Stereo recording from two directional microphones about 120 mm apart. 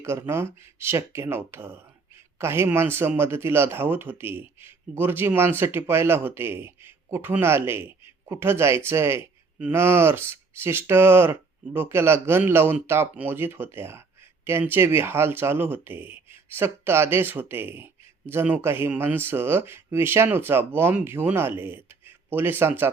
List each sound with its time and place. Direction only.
0.0 s speech: 20° right (ahead or behind)